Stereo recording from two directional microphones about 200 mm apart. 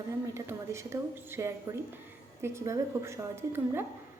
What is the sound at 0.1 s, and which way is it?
A woman's voice, 15° right (ahead or behind).